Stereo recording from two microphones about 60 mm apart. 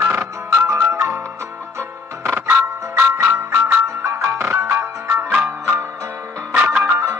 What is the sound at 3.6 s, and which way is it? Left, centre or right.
Music, right.